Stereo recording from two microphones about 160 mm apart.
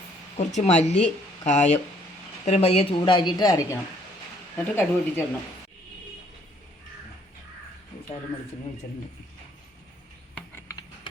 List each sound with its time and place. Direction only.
0.3 s speech: 45° left (ahead or behind)
3.0 s a woman's voice: 30° left (ahead or behind)
4.5 s speech: 10° left (ahead or behind)
10.5 s a sound: 20° left (ahead or behind)